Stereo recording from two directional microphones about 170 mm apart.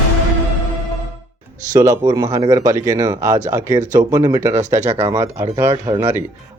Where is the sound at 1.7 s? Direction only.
20° right (ahead or behind).